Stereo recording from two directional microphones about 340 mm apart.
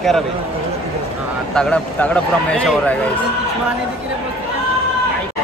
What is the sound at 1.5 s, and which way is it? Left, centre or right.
Speech, centre.